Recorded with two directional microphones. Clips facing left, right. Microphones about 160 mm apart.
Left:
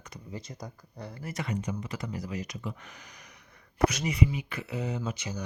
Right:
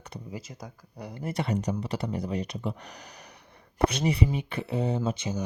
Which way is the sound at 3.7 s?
30° right (ahead or behind).